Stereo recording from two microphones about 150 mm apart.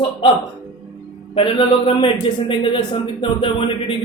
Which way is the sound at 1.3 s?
35° left (ahead or behind).